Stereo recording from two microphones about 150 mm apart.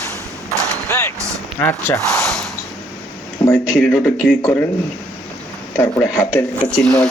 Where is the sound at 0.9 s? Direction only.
20° left (ahead or behind).